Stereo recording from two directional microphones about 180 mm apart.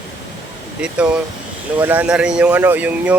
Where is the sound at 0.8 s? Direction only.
5° right (ahead or behind).